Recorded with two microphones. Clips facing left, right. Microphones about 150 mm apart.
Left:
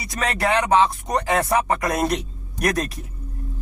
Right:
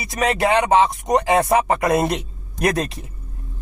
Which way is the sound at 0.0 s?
20° right (ahead or behind).